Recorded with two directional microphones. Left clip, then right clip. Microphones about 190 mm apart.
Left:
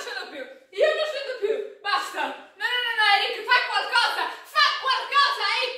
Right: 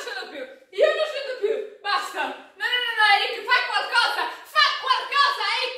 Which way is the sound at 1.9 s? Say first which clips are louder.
Right 1 dB; centre (ahead or behind).